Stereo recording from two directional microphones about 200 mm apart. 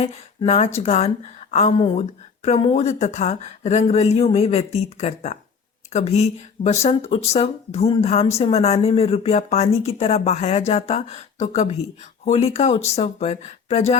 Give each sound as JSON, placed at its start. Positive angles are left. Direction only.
{"t": 0.0, "sound": "speech", "side_deg": 30}